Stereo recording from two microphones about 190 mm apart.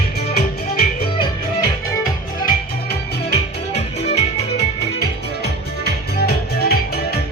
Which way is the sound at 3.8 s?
35° left (ahead or behind).